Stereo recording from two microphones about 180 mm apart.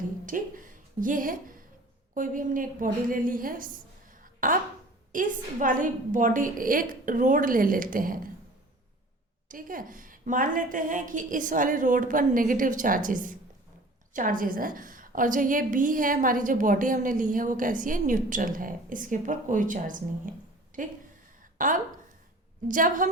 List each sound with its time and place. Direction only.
0.3 s a woman's voice: 50° right (ahead or behind)
4.1 s a sound: 50° right (ahead or behind)
5.1 s a woman's voice: 45° right (ahead or behind)
9.5 s a woman's voice: 50° right (ahead or behind)